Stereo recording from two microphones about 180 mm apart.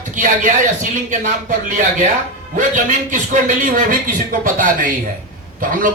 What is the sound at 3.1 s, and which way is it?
Speech, 45° right (ahead or behind).